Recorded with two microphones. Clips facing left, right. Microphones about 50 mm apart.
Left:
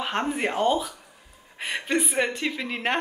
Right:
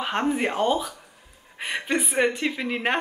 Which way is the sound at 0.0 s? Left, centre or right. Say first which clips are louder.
Right 2 dB; centre.